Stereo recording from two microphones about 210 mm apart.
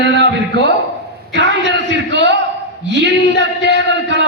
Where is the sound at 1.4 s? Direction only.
55° right (ahead or behind).